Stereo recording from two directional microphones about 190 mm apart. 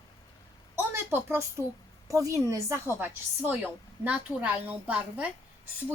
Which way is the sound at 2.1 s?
15° right (ahead or behind).